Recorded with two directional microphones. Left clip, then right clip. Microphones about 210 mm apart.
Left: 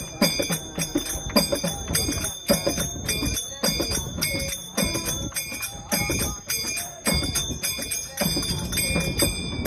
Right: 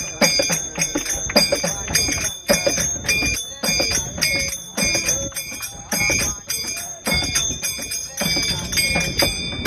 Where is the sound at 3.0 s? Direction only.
35° left (ahead or behind).